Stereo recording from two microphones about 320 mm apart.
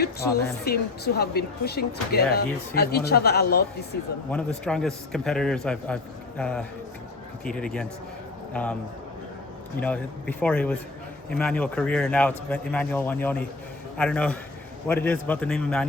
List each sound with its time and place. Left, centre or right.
0.0 s speech: left
4.3 s a man's voice: centre
9.8 s a man's voice: centre